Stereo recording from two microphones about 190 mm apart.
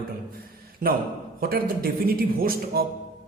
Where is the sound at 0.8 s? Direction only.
45° right (ahead or behind).